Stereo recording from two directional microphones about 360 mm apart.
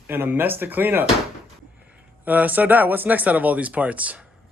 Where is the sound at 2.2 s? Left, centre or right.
Centre.